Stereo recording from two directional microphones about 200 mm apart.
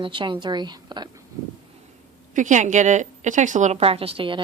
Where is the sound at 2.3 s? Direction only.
40° right (ahead or behind).